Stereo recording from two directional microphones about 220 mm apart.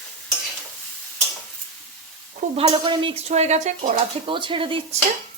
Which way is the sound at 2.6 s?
25° right (ahead or behind).